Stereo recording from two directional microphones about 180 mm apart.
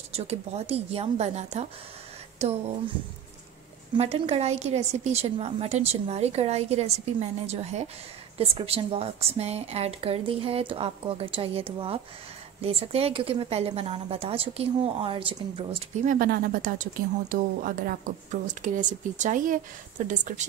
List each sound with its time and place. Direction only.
0.1 s a woman's voice: 35° right (ahead or behind)
3.9 s a woman's voice: 30° right (ahead or behind)
16.1 s a woman's voice: 55° right (ahead or behind)